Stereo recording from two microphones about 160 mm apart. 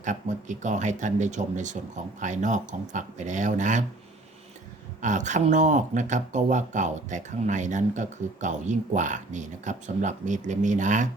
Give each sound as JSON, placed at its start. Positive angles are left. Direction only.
{"t": 0.0, "sound": "speech", "side_deg": -50}
{"t": 5.0, "sound": "speech", "side_deg": -50}